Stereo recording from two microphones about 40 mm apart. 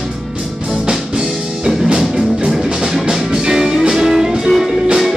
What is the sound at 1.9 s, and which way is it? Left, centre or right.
Music, centre.